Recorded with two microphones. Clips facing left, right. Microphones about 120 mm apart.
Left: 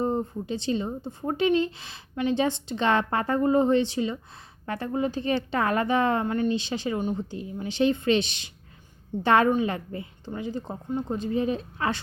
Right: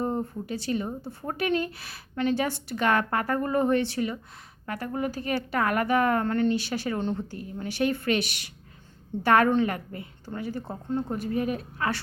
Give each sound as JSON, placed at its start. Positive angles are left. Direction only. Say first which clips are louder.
{"t": 0.0, "sound": "speech", "louder": "left 2 dB", "side_deg": 20}